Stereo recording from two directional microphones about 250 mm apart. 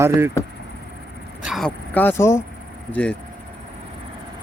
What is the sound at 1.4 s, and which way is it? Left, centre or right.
Speech, centre.